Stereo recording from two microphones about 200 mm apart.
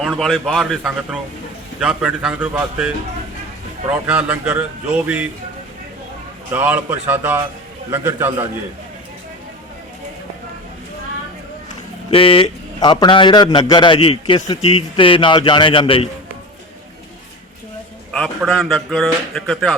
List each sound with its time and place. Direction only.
0.0 s a man's voice: centre (ahead or behind)
6.5 s a man's voice: 10° right (ahead or behind)
11.7 s a man's voice: 25° left (ahead or behind)
18.1 s speech: 5° left (ahead or behind)